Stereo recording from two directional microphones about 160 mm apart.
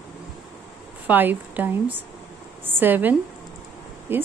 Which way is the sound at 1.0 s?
10° right (ahead or behind).